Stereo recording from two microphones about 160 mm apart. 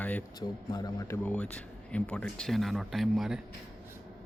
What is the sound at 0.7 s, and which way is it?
Speech, 25° left (ahead or behind).